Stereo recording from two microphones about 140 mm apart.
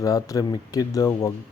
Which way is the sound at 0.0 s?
25° left (ahead or behind).